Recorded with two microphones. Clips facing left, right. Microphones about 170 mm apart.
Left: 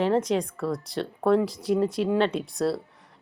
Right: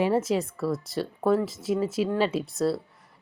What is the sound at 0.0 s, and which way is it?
A woman's voice, 5° right (ahead or behind).